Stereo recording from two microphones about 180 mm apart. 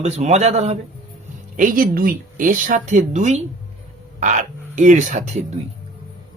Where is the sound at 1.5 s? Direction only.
50° right (ahead or behind).